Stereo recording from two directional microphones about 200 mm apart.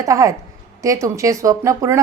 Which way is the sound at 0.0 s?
15° right (ahead or behind).